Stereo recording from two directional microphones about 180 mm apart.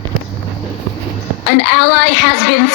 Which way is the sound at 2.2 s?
65° left (ahead or behind).